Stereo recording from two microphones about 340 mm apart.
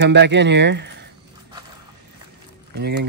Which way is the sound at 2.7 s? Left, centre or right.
Right.